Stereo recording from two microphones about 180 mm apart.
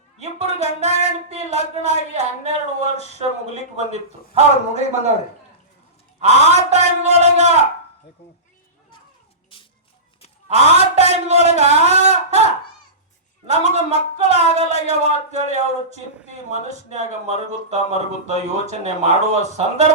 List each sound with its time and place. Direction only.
0.2 s speech: 40° right (ahead or behind)
6.1 s speech: 35° right (ahead or behind)
10.5 s speech: 35° right (ahead or behind)
13.5 s speech: 40° right (ahead or behind)